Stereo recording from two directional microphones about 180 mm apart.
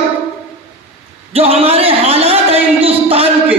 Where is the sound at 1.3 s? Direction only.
35° right (ahead or behind).